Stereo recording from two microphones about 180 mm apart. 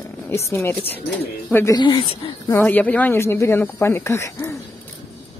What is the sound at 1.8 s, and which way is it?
Speech, 25° left (ahead or behind).